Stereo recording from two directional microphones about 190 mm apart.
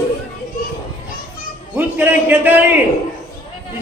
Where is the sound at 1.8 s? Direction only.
10° right (ahead or behind).